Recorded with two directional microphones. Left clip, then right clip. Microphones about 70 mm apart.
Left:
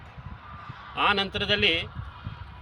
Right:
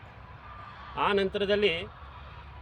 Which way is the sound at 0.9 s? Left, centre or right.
Right.